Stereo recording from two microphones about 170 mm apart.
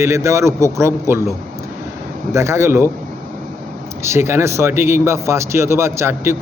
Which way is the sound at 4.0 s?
15° right (ahead or behind).